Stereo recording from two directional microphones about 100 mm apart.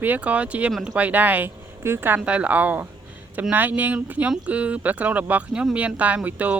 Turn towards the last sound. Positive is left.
turn(degrees=-15)  # may be behind; listen again after turning